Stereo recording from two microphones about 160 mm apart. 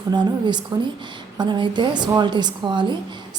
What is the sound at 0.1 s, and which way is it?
A woman's voice, 30° right (ahead or behind).